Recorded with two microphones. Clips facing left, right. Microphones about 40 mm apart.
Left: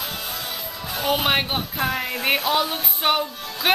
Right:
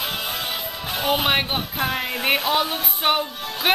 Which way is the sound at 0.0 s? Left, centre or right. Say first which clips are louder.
Right 4 dB; right.